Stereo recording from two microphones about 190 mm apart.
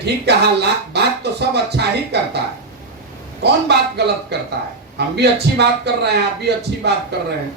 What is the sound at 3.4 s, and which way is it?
A man's voice, 60° right (ahead or behind).